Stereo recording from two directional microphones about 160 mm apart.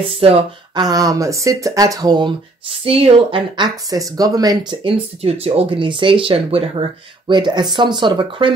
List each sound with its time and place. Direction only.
0.1 s speech: 35° right (ahead or behind)
0.8 s speech: 25° right (ahead or behind)
2.8 s speech: 35° right (ahead or behind)